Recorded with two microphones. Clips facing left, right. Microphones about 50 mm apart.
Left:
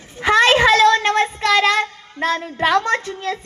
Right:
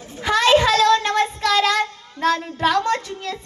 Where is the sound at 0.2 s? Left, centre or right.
Left.